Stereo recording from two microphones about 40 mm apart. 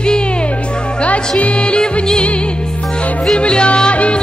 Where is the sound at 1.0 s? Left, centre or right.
Left.